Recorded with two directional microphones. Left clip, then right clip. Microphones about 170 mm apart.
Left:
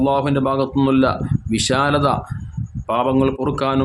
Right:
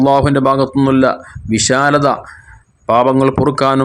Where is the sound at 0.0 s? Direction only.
35° right (ahead or behind).